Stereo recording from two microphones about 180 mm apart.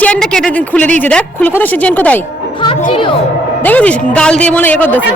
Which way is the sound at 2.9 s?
30° left (ahead or behind).